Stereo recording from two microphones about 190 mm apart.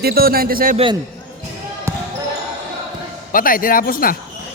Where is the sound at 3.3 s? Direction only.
45° left (ahead or behind).